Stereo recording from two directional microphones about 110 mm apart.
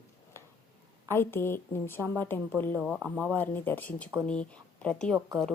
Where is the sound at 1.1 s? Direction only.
20° left (ahead or behind).